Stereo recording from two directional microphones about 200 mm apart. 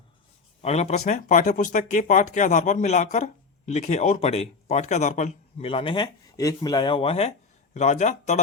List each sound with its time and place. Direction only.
0.6 s speech: 35° left (ahead or behind)